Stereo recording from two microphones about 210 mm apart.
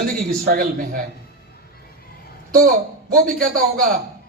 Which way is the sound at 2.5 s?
45° right (ahead or behind).